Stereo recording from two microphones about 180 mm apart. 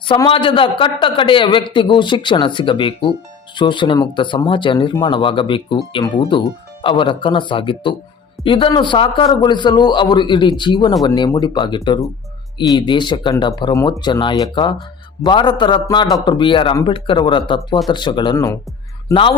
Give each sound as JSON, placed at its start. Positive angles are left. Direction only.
{"t": 0.1, "sound": "a man's voice", "side_deg": 30}